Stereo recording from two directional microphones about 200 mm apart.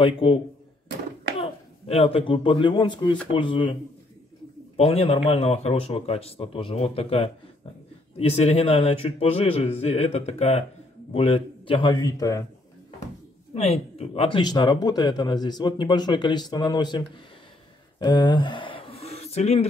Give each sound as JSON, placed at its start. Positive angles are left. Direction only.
{"t": 0.0, "sound": "speech", "side_deg": 25}
{"t": 1.4, "sound": "speech", "side_deg": 30}
{"t": 4.7, "sound": "a man's voice", "side_deg": 30}
{"t": 13.6, "sound": "speech", "side_deg": 30}
{"t": 17.9, "sound": "a sound", "side_deg": 20}